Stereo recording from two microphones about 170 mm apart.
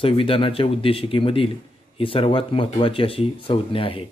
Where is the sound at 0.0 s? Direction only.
30° left (ahead or behind).